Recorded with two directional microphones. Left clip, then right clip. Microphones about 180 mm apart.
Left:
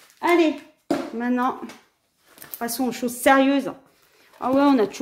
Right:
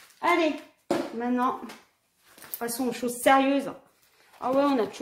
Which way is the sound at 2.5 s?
50° left (ahead or behind).